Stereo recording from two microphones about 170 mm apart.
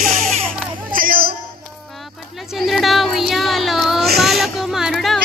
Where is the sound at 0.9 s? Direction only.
55° right (ahead or behind).